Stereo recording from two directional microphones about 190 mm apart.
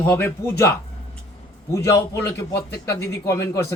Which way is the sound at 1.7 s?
15° left (ahead or behind).